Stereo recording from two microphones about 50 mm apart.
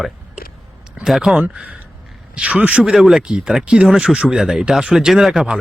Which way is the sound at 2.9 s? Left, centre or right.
Centre.